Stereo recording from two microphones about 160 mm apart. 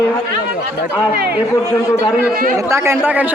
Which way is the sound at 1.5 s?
20° left (ahead or behind).